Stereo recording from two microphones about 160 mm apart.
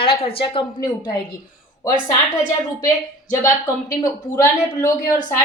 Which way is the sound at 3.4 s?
20° left (ahead or behind).